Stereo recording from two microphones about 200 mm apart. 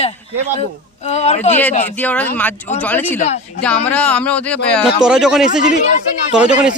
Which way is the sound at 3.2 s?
35° left (ahead or behind).